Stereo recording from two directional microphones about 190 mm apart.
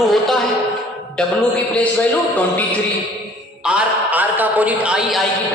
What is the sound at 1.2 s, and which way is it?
Speech, 5° left (ahead or behind).